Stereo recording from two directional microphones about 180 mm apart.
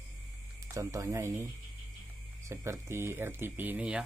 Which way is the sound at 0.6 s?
15° right (ahead or behind).